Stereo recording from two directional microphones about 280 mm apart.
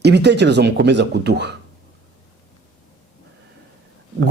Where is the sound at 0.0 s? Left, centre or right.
Right.